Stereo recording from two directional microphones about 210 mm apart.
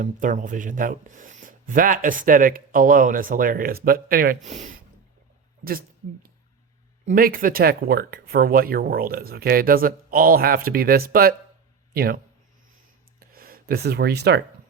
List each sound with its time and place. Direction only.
0.0 s speech: 40° right (ahead or behind)
7.1 s speech: 45° right (ahead or behind)
13.1 s a sound: 45° right (ahead or behind)